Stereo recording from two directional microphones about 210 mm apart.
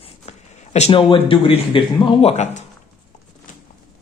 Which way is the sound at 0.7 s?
30° left (ahead or behind).